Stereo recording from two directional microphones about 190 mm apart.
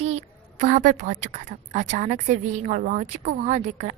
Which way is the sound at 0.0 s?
35° right (ahead or behind).